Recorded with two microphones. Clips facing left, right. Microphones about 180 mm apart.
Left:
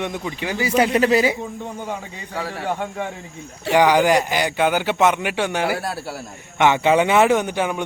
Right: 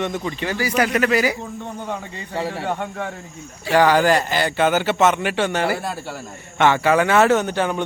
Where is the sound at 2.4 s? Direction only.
25° right (ahead or behind).